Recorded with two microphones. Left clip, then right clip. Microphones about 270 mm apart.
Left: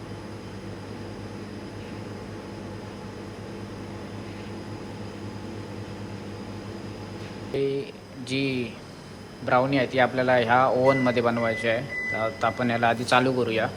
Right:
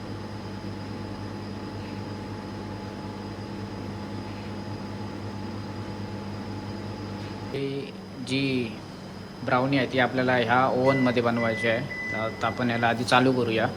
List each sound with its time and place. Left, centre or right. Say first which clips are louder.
7.5 s speech: left 6 dB; centre